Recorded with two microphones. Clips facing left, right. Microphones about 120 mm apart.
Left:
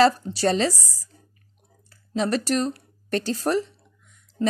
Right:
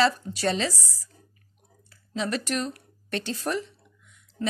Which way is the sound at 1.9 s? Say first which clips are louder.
Left 5 dB; 40° left (ahead or behind).